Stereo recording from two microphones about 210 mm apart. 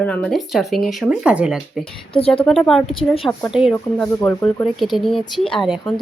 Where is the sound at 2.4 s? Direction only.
Centre (ahead or behind).